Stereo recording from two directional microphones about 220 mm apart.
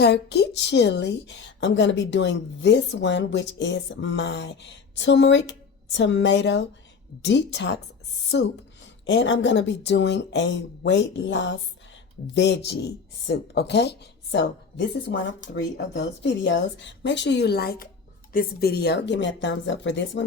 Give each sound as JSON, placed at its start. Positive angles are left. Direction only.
{"t": 0.0, "sound": "a woman's voice", "side_deg": 50}
{"t": 9.0, "sound": "a woman's voice", "side_deg": 55}